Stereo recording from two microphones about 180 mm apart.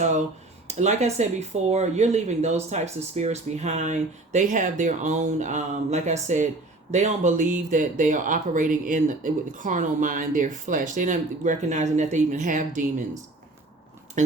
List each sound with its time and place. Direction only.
0.7 s speech: 40° right (ahead or behind)